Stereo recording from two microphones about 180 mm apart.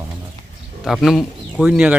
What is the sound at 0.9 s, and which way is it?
Speech, centre (ahead or behind).